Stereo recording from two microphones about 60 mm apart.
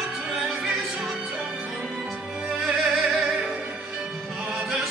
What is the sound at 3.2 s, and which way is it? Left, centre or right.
Music, right.